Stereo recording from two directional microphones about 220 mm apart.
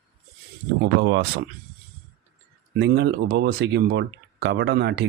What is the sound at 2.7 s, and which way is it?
Speech, 50° right (ahead or behind).